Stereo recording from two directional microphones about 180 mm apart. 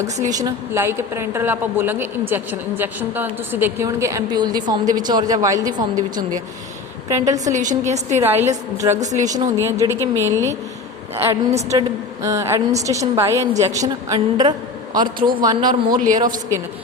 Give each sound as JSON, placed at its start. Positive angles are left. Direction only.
{"t": 0.3, "sound": "a woman's voice", "side_deg": -20}
{"t": 7.5, "sound": "a woman's voice", "side_deg": -45}
{"t": 8.2, "sound": "a woman's voice", "side_deg": -10}
{"t": 9.0, "sound": "a woman's voice", "side_deg": -40}
{"t": 9.6, "sound": "a woman's voice", "side_deg": -15}
{"t": 16.0, "sound": "speech", "side_deg": -45}